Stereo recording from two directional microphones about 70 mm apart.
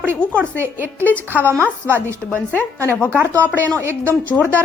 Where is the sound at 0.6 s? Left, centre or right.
Right.